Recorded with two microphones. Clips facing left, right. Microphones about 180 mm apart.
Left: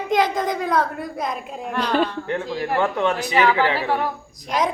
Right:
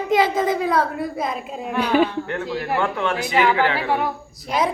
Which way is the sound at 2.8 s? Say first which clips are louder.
Left 4 dB; 20° left (ahead or behind).